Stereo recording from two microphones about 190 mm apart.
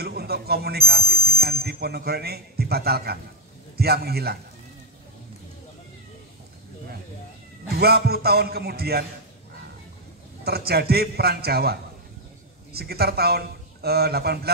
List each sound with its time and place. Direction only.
0.0 s a man's voice: 55° right (ahead or behind)
7.7 s a man's voice: 55° right (ahead or behind)
10.4 s a man's voice: 55° right (ahead or behind)